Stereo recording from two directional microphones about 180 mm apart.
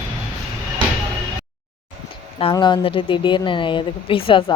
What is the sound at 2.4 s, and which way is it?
A woman's voice, 25° left (ahead or behind).